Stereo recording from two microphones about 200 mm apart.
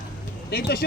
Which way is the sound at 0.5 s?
55° left (ahead or behind).